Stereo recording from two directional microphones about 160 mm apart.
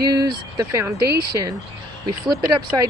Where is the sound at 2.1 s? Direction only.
25° right (ahead or behind).